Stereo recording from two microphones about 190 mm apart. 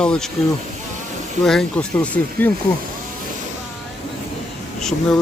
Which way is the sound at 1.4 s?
5° left (ahead or behind).